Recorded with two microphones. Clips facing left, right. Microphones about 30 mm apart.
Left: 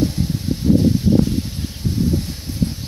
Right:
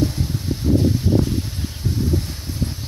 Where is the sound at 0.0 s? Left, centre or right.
Left.